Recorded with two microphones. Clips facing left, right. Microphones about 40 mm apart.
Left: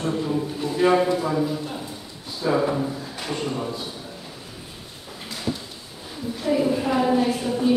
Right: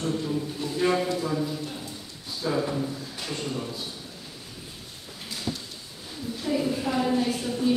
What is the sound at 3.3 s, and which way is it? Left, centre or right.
Speech, centre.